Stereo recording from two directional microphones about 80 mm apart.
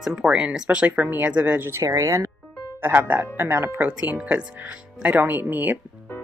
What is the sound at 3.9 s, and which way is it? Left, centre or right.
Speech, centre.